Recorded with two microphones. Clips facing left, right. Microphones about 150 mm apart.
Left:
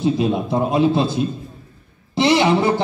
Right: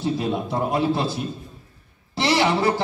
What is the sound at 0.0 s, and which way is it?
A man's voice, 20° left (ahead or behind).